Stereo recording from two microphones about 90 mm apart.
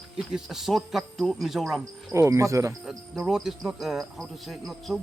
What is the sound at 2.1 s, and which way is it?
Speech, 35° right (ahead or behind).